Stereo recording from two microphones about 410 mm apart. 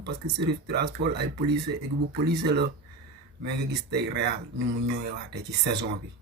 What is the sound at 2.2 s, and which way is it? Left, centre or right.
Speech, right.